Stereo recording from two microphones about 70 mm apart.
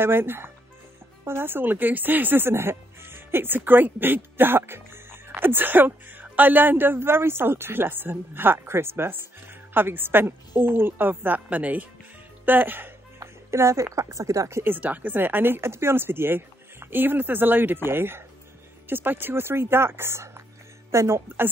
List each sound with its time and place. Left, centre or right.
0.0 s speech: right
13.2 s speech: right
14.6 s speech: right